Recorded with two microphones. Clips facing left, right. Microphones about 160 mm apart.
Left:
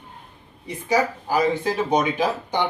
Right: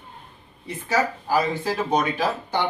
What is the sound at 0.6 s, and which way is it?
Speech, 15° left (ahead or behind).